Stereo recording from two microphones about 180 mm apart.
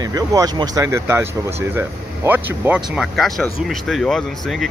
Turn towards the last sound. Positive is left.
turn(degrees=0)  # may be behind; listen again after turning